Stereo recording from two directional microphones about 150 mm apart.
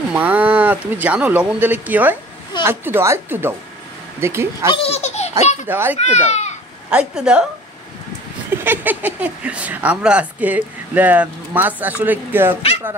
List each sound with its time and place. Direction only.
0.1 s speech: 10° right (ahead or behind)
4.7 s baby laughter: 45° left (ahead or behind)
5.4 s a child's voice: 50° left (ahead or behind)
5.7 s speech: 15° right (ahead or behind)
5.9 s speech: 45° left (ahead or behind)
6.9 s speech: 5° right (ahead or behind)
8.6 s speech: 10° right (ahead or behind)